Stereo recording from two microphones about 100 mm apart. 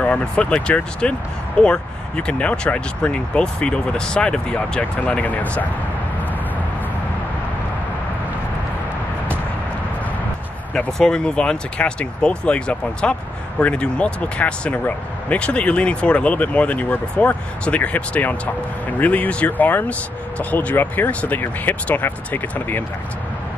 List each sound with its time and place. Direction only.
0.0 s speech: 10° left (ahead or behind)
10.7 s speech: 5° left (ahead or behind)